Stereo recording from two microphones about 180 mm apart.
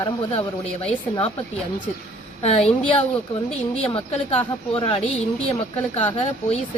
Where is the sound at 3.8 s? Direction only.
30° left (ahead or behind).